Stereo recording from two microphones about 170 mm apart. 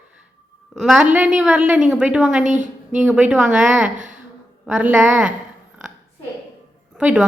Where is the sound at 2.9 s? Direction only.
5° right (ahead or behind).